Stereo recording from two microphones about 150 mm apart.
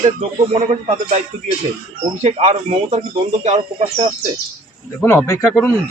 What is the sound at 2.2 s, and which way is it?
Speech, 45° right (ahead or behind).